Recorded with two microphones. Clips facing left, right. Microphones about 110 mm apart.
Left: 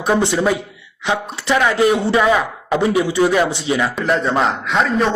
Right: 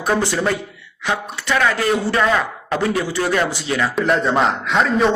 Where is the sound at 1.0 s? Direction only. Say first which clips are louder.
Left 3 dB; 20° left (ahead or behind).